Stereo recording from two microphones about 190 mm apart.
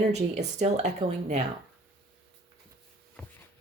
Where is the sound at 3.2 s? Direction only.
5° left (ahead or behind).